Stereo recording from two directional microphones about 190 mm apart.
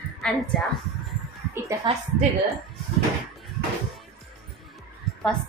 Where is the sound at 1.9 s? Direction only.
25° right (ahead or behind).